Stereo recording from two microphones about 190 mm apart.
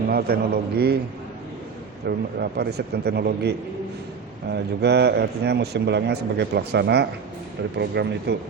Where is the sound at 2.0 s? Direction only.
60° right (ahead or behind).